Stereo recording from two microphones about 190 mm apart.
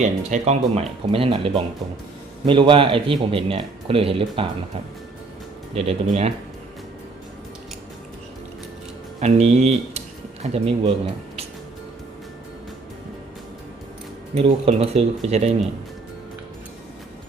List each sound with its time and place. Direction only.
0.0 s a man's voice: 35° right (ahead or behind)
5.7 s speech: 35° right (ahead or behind)
9.2 s speech: 35° right (ahead or behind)
14.3 s speech: 30° right (ahead or behind)